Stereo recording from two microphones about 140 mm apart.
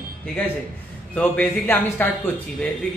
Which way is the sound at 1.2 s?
10° left (ahead or behind).